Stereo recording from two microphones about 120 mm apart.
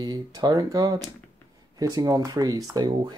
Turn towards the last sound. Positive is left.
turn(degrees=-35)  # may be behind; listen again after turning